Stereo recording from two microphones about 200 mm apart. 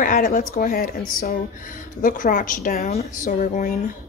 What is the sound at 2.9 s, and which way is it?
Speech, 35° left (ahead or behind).